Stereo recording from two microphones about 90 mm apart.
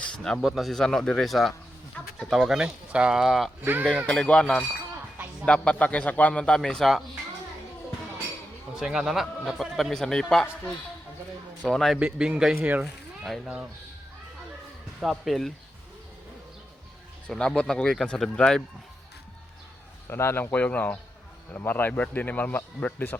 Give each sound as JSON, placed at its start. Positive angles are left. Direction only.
{"t": 0.0, "sound": "speech", "side_deg": 10}
{"t": 3.6, "sound": "speech", "side_deg": -20}
{"t": 4.0, "sound": "a man's voice", "side_deg": 10}
{"t": 8.7, "sound": "speech", "side_deg": -5}
{"t": 11.6, "sound": "a man's voice", "side_deg": 10}
{"t": 11.9, "sound": "a man's voice", "side_deg": -10}
{"t": 15.0, "sound": "speech", "side_deg": 0}
{"t": 17.2, "sound": "a man's voice", "side_deg": 10}
{"t": 20.1, "sound": "speech", "side_deg": 30}